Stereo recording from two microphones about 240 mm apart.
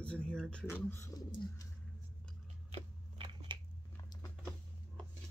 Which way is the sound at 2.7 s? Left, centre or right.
Right.